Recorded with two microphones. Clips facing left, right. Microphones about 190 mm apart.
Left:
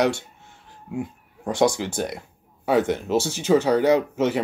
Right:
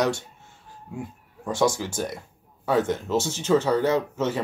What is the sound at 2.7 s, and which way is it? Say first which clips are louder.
Speech: left 2 dB; 15° left (ahead or behind).